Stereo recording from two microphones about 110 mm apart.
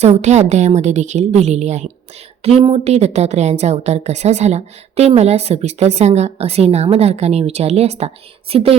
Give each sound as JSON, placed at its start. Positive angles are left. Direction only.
{"t": 0.0, "sound": "a woman's voice", "side_deg": -90}
{"t": 2.4, "sound": "a woman's voice", "side_deg": -65}